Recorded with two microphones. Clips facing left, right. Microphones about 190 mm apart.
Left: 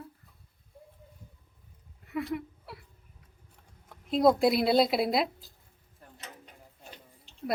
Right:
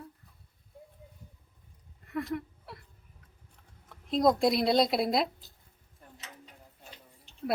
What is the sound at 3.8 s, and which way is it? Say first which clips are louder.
Speech: left 2 dB; 5° left (ahead or behind).